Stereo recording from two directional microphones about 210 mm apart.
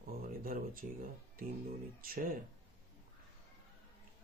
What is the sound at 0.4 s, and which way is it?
Speech, 45° right (ahead or behind).